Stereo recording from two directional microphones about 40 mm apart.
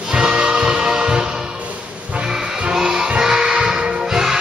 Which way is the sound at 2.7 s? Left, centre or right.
Centre.